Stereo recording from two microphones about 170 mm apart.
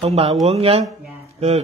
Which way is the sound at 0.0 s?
30° right (ahead or behind).